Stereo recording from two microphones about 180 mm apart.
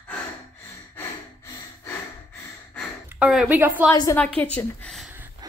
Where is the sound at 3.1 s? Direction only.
5° right (ahead or behind).